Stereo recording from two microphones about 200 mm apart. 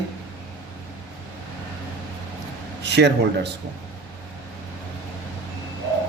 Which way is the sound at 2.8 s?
60° right (ahead or behind).